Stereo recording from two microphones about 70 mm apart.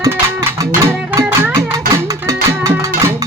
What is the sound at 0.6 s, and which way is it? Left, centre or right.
Music, right.